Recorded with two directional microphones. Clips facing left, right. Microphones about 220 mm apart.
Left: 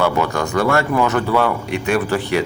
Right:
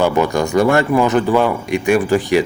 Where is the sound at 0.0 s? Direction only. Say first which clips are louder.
Right 3 dB; 15° right (ahead or behind).